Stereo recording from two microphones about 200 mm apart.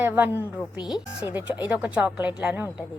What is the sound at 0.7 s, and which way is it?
Speech, 5° right (ahead or behind).